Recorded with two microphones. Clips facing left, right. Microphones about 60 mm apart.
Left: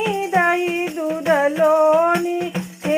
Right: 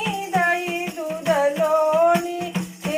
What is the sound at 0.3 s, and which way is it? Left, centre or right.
Music, left.